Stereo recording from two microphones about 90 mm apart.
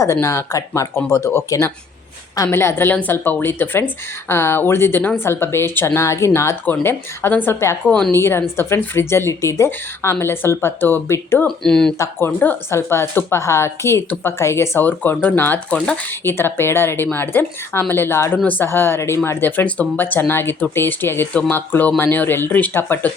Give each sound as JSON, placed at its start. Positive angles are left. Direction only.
{"t": 0.0, "sound": "a woman's voice", "side_deg": 35}
{"t": 2.5, "sound": "a woman's voice", "side_deg": 25}
{"t": 7.9, "sound": "speech", "side_deg": 10}
{"t": 8.1, "sound": "a woman's voice", "side_deg": 30}
{"t": 11.4, "sound": "speech", "side_deg": 5}
{"t": 12.7, "sound": "a woman's voice", "side_deg": 30}